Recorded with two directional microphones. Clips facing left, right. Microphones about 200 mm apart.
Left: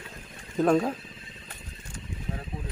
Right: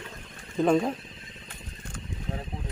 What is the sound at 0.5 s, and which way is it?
Speech, 5° left (ahead or behind).